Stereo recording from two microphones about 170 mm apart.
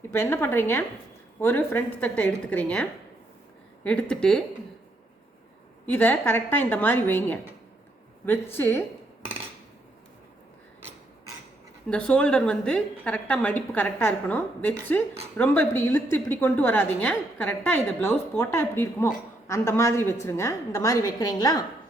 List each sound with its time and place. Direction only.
0.1 s a woman's voice: 15° left (ahead or behind)
4.1 s speech: 5° left (ahead or behind)
5.8 s a woman's voice: 10° left (ahead or behind)
8.5 s a woman's voice: 10° left (ahead or behind)
11.9 s a woman's voice: 5° left (ahead or behind)